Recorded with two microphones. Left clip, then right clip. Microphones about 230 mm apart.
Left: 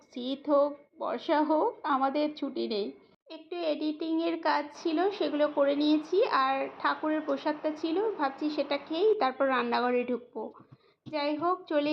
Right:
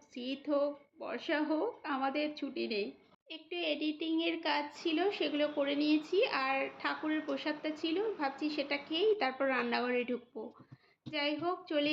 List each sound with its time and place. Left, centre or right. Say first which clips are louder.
0.1 s speech: left 5 dB; left
0.4 s a woman's voice: left 7 dB; centre
1.0 s a woman's voice: left 7 dB; left
1.8 s a woman's voice: left 7 dB; centre
2.6 s a woman's voice: left 4 dB; left
3.2 s a woman's voice: left 4 dB; centre